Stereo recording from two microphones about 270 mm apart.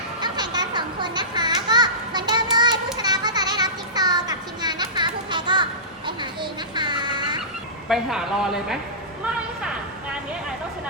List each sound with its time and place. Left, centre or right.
0.2 s children playing: centre
6.1 s a sound: centre
7.9 s a woman's voice: centre